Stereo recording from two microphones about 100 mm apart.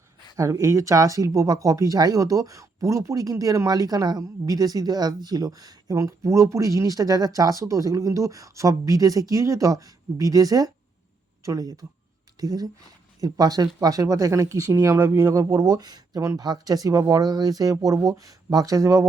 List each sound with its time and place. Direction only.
0.3 s speech: 35° right (ahead or behind)